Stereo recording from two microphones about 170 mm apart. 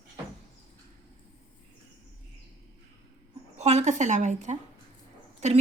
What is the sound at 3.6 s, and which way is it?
A woman's voice, 40° right (ahead or behind).